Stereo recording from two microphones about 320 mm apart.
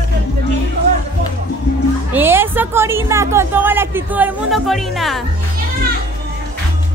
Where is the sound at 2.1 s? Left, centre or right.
Centre.